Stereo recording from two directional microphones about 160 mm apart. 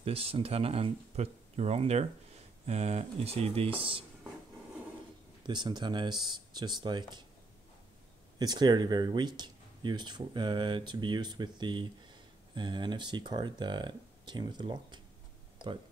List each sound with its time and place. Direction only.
0.0 s speech: 35° right (ahead or behind)
5.4 s speech: 30° right (ahead or behind)
8.4 s speech: 25° right (ahead or behind)